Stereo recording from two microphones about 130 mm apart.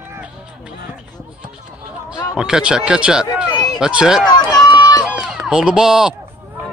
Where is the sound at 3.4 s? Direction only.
30° left (ahead or behind).